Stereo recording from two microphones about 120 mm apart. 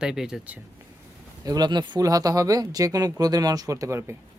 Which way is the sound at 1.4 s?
35° right (ahead or behind).